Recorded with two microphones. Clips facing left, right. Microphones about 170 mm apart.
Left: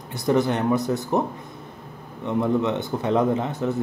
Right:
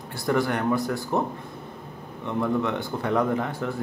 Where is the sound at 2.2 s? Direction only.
20° left (ahead or behind).